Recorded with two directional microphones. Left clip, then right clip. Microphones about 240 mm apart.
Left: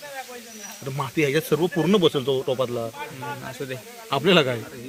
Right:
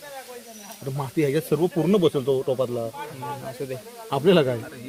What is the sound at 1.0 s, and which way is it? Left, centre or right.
Speech, centre.